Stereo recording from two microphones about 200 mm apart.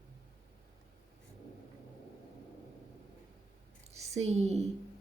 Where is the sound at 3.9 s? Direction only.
35° right (ahead or behind).